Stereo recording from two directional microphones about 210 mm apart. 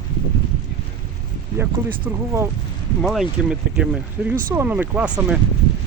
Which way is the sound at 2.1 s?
10° right (ahead or behind).